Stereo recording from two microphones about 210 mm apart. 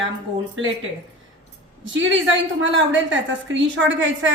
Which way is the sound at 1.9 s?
65° right (ahead or behind).